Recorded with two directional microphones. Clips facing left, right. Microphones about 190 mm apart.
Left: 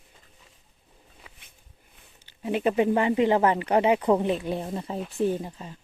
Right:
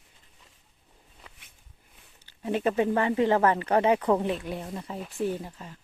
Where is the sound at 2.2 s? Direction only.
15° left (ahead or behind).